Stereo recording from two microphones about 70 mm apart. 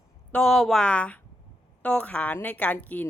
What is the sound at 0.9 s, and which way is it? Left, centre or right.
A woman's voice, centre.